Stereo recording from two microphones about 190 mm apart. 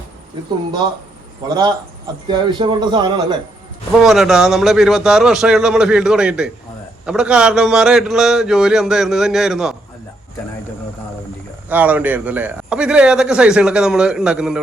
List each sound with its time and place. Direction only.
2.2 s speech: 25° right (ahead or behind)
4.0 s a man's voice: centre (ahead or behind)
11.7 s a man's voice: 10° right (ahead or behind)